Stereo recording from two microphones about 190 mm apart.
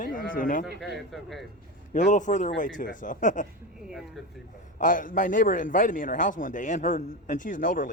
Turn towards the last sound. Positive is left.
turn(degrees=45)  # may be behind; listen again after turning